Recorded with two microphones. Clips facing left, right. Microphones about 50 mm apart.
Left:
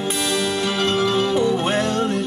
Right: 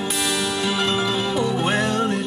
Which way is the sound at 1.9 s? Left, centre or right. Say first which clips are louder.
Left 1 dB; right.